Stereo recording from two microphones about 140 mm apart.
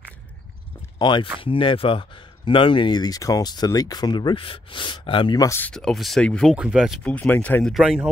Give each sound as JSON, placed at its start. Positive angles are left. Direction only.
{"t": 0.9, "sound": "speech", "side_deg": 35}
{"t": 5.5, "sound": "speech", "side_deg": 10}
{"t": 6.5, "sound": "speech", "side_deg": -5}
{"t": 7.0, "sound": "speech", "side_deg": 10}
{"t": 7.7, "sound": "speech", "side_deg": -5}